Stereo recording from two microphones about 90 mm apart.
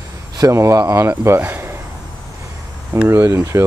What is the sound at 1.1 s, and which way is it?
Speech, 20° right (ahead or behind).